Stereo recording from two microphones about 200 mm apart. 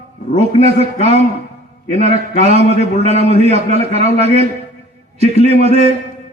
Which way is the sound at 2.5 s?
30° right (ahead or behind).